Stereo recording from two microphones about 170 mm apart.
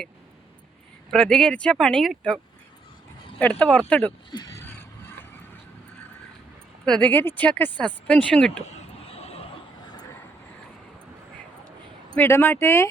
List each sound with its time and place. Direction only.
1.1 s speech: 5° left (ahead or behind)
4.3 s a sound: 25° left (ahead or behind)
6.8 s speech: 5° left (ahead or behind)
8.6 s vehicle: 35° left (ahead or behind)
12.1 s speech: 15° left (ahead or behind)